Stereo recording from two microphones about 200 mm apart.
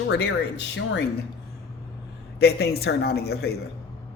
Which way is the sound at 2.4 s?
55° left (ahead or behind).